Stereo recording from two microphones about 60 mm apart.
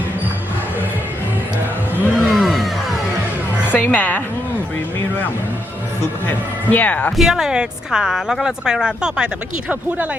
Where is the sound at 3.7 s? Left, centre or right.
Left.